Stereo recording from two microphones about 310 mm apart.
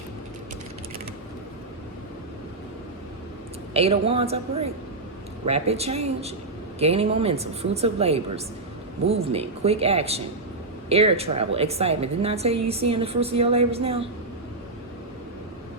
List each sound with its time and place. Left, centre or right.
3.8 s a woman's voice: centre